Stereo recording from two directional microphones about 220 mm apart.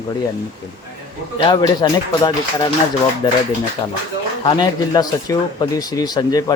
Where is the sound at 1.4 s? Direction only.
20° left (ahead or behind).